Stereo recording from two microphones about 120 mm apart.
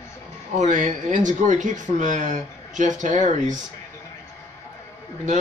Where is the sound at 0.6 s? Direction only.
90° right.